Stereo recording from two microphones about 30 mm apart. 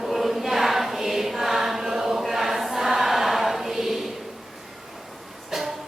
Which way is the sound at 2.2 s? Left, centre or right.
Centre.